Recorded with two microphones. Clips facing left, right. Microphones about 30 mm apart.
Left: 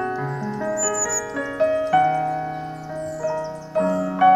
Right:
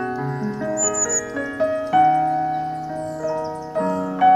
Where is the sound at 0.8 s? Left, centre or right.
Centre.